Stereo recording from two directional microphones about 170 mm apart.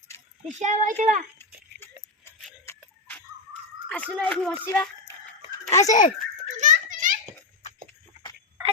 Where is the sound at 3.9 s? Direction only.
10° left (ahead or behind).